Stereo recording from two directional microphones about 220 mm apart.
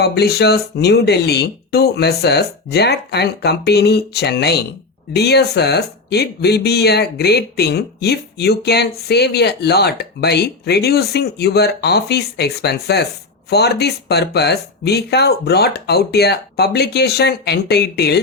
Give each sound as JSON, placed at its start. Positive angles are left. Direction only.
{"t": 0.0, "sound": "speech", "side_deg": 45}